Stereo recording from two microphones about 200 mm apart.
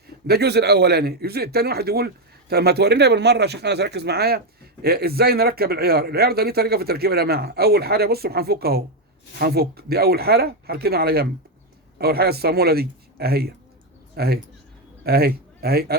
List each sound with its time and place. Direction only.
0.3 s speech: 55° right (ahead or behind)